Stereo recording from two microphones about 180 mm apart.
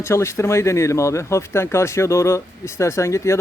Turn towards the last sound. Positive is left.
turn(degrees=15)  # may be behind; listen again after turning